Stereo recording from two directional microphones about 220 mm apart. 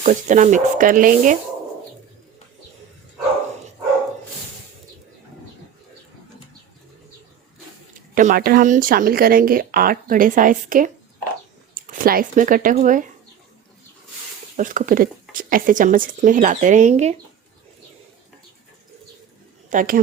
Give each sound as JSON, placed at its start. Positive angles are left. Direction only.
{"t": 0.0, "sound": "speech", "side_deg": -35}
{"t": 7.9, "sound": "speech", "side_deg": -35}
{"t": 14.5, "sound": "speech", "side_deg": -35}
{"t": 19.7, "sound": "speech", "side_deg": -35}